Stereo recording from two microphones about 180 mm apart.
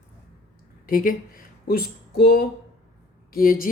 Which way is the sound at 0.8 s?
50° left (ahead or behind).